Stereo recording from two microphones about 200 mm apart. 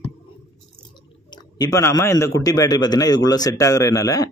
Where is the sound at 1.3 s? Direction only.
20° left (ahead or behind).